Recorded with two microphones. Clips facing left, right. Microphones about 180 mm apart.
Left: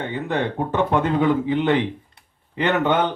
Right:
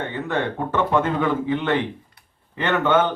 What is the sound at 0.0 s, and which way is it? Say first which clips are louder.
Speech: left 1 dB; 15° left (ahead or behind).